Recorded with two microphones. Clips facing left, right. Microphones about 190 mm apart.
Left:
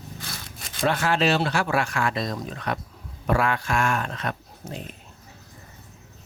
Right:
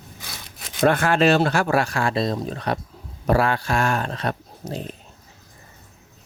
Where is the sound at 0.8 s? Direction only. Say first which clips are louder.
Right 5 dB; 55° right (ahead or behind); by 5.0 s 35° right (ahead or behind).